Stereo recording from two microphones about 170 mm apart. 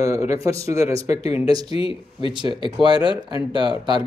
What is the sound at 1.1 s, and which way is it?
Speech, 35° left (ahead or behind).